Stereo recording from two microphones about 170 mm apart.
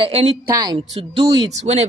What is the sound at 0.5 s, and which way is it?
Speech, 25° right (ahead or behind).